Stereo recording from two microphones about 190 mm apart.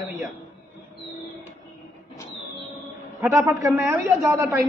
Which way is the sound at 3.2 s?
10° right (ahead or behind).